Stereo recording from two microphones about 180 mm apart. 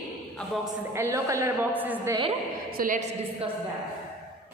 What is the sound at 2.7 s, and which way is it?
Speech, 50° right (ahead or behind).